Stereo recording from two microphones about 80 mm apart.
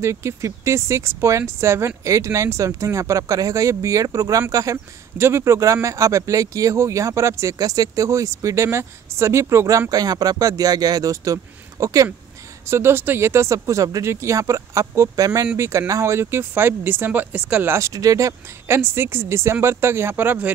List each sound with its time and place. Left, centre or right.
0.0 s speech: right
7.5 s speech: right
12.6 s speech: right
17.7 s speech: right
18.8 s speech: right